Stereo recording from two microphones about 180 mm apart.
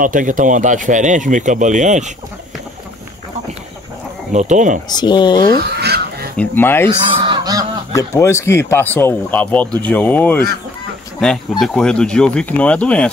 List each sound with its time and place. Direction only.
0.0 s speech: 45° right (ahead or behind)
4.3 s speech: 40° right (ahead or behind)
4.8 s speech: 25° left (ahead or behind)
5.8 s fowl: 60° right (ahead or behind)
6.3 s speech: 10° left (ahead or behind)
7.2 s goose: 25° right (ahead or behind)
7.9 s speech: 15° left (ahead or behind)